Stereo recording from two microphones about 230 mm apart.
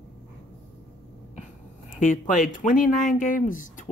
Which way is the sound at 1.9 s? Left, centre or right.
Left.